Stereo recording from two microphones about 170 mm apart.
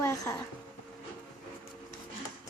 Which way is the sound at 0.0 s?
15° left (ahead or behind).